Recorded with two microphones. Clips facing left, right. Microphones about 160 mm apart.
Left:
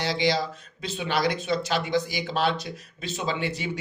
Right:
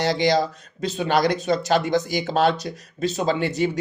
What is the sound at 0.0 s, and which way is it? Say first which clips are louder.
Speech: right 5 dB; 45° right (ahead or behind).